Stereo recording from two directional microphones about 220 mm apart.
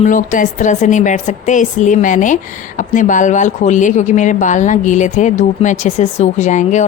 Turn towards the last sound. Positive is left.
turn(degrees=35)  # may be behind; listen again after turning